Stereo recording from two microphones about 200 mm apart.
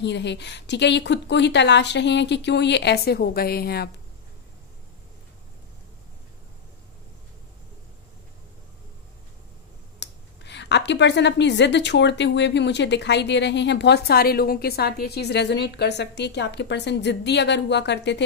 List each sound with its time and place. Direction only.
0.0 s speech: 60° left (ahead or behind)
9.9 s speech: 60° left (ahead or behind)